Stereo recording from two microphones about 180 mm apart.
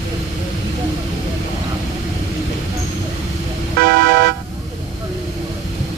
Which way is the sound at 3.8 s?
70° right (ahead or behind).